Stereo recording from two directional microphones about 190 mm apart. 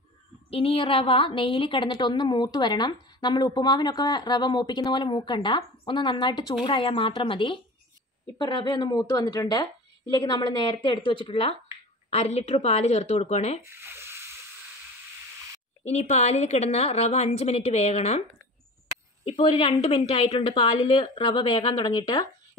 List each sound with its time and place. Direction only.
0.5 s a woman's voice: 30° left (ahead or behind)
13.7 s sizzle: 10° right (ahead or behind)
15.8 s a woman's voice: 35° left (ahead or behind)
19.2 s a woman's voice: 30° left (ahead or behind)